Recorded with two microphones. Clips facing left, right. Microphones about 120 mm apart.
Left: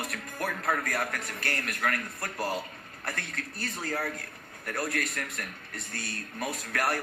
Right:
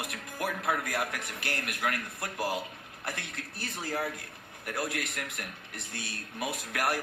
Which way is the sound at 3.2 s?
65° left (ahead or behind).